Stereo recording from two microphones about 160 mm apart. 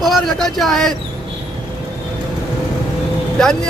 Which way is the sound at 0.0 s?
Centre (ahead or behind).